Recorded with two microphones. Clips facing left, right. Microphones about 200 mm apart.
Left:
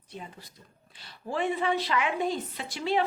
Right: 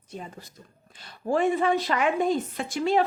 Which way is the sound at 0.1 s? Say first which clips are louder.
Right 4 dB; 45° right (ahead or behind).